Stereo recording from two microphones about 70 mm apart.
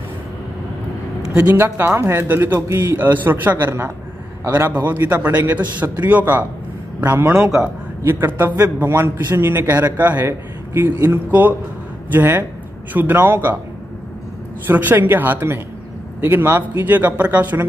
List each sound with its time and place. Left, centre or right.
1.3 s a man's voice: right
14.7 s a man's voice: right